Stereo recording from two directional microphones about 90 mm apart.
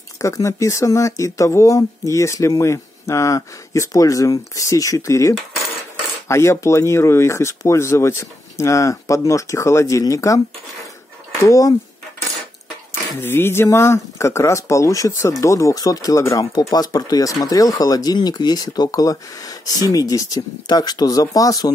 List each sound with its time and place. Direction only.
0.2 s speech: 35° left (ahead or behind)
11.4 s speech: 40° left (ahead or behind)
13.2 s speech: 25° left (ahead or behind); by 21.7 s 40° left (ahead or behind)